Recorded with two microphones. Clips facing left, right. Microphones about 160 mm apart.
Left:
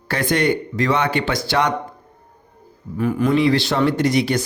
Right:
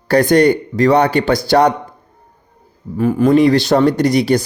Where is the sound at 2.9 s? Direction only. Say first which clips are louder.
Right 6 dB; 30° right (ahead or behind).